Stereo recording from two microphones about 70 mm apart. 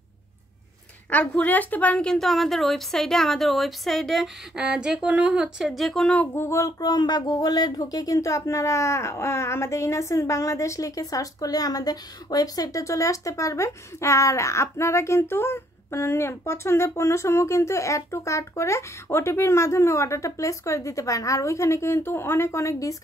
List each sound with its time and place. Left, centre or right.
1.1 s speech: centre
2.0 s speech: centre
4.6 s speech: centre
5.8 s speech: centre
6.3 s a sound: left
6.8 s speech: left